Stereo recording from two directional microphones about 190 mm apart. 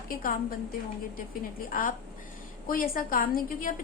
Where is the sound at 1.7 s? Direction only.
45° left (ahead or behind).